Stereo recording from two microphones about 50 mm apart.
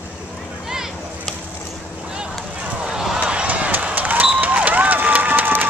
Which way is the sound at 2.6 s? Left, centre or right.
Right.